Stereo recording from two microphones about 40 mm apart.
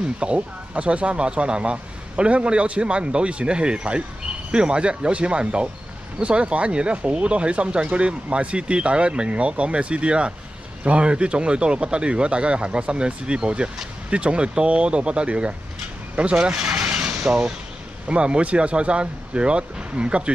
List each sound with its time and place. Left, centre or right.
0.2 s speech: right
16.8 s mechanisms: right
17.2 s speech: right